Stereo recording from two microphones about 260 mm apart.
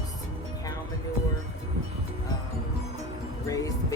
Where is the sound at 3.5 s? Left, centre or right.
Centre.